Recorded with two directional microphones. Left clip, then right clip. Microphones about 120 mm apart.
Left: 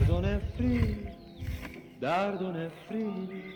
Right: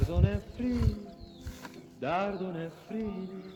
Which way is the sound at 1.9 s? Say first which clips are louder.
Left 2 dB; 35° left (ahead or behind).